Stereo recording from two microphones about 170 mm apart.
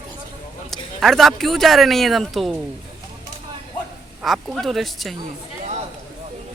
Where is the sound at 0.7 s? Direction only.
Centre (ahead or behind).